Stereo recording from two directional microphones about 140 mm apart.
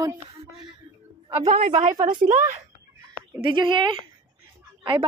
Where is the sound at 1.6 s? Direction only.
55° right (ahead or behind).